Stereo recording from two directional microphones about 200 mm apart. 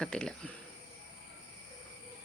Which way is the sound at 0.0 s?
5° left (ahead or behind).